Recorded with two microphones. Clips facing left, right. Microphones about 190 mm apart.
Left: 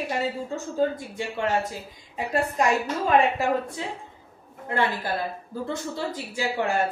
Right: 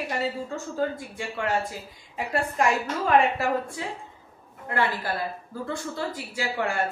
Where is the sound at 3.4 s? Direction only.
20° left (ahead or behind).